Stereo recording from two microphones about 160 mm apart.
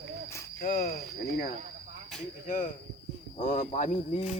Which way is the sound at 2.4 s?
55° left (ahead or behind).